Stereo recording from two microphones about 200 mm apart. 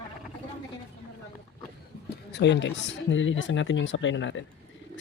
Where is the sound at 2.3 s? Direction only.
60° left (ahead or behind).